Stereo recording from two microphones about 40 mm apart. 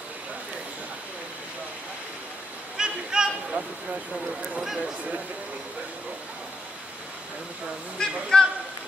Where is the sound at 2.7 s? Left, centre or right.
Centre.